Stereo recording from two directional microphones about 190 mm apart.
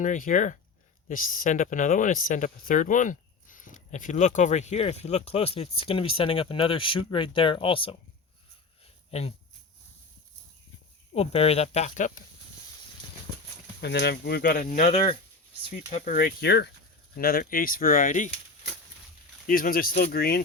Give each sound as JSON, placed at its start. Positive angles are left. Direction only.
{"t": 0.0, "sound": "speech", "side_deg": 40}
{"t": 11.1, "sound": "speech", "side_deg": 35}
{"t": 13.8, "sound": "speech", "side_deg": 60}
{"t": 19.5, "sound": "speech", "side_deg": 50}